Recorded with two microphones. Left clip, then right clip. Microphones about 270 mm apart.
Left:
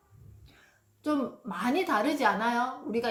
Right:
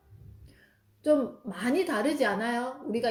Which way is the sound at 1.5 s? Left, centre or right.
Centre.